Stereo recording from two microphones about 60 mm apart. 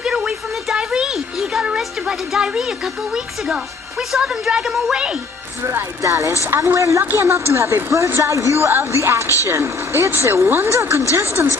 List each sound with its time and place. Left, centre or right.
0.0 s a sound: centre
2.0 s a woman's voice: centre
4.1 s a woman's voice: centre
5.6 s speech: right
6.0 s speech: right
6.5 s speech: right